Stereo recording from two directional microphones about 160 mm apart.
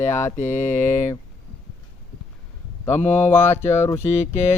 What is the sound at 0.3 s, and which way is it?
Speech, 50° left (ahead or behind).